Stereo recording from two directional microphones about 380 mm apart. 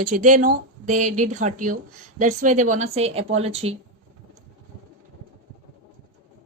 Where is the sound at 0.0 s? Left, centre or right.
Centre.